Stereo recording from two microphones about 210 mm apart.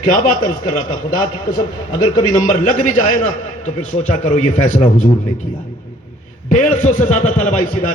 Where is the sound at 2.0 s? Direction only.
40° left (ahead or behind).